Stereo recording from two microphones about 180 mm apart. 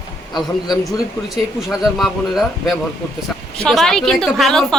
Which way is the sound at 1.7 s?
Centre (ahead or behind).